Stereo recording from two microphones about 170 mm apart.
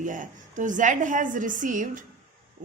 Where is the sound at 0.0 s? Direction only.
50° right (ahead or behind).